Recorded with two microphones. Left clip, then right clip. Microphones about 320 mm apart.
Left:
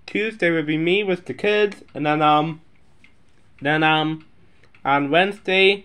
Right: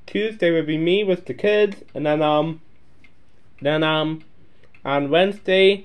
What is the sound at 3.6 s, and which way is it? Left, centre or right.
Speech, left.